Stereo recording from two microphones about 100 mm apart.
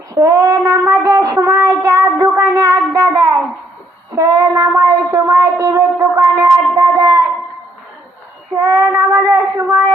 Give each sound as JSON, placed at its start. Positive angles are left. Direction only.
{"t": 0.1, "sound": "child singing", "side_deg": -35}
{"t": 4.1, "sound": "a sound", "side_deg": -35}
{"t": 8.5, "sound": "child singing", "side_deg": -35}